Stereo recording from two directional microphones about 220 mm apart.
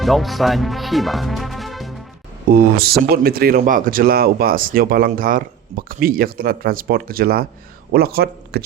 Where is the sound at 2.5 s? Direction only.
45° right (ahead or behind).